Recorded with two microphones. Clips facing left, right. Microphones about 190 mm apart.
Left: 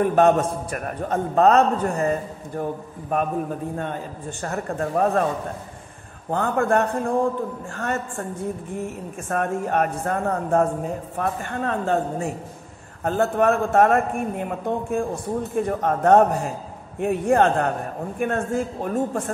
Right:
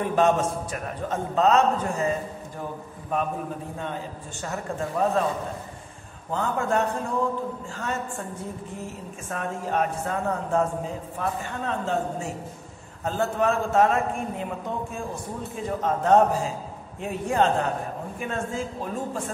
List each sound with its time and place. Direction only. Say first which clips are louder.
0.0 s a man's voice: left 4 dB; 55° left (ahead or behind)
3.7 s a man's voice: left 4 dB; 50° left (ahead or behind)
6.3 s a man's voice: left 4 dB; 55° left (ahead or behind)
9.3 s a man's voice: left 5 dB; 55° left (ahead or behind)